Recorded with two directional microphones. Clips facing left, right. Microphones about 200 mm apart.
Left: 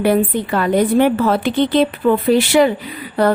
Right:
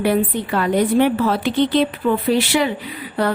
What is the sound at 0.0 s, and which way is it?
Speech, 45° left (ahead or behind).